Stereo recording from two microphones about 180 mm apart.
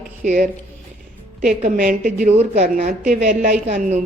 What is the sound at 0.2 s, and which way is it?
A woman's voice, 50° right (ahead or behind).